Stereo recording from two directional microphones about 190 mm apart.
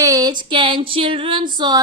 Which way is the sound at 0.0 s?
20° right (ahead or behind).